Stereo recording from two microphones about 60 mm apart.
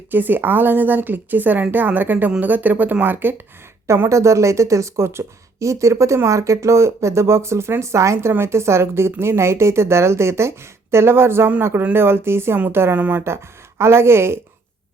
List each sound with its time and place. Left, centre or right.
0.1 s a woman's voice: right
3.8 s a woman's voice: right
13.0 s speech: right
13.2 s a woman's voice: right